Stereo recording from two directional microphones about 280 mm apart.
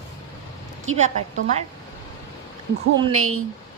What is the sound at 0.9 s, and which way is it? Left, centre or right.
Speech, right.